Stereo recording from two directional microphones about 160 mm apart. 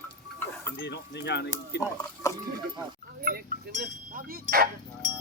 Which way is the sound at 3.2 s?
65° right (ahead or behind).